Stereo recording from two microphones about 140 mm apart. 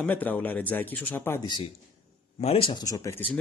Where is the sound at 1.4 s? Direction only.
30° left (ahead or behind).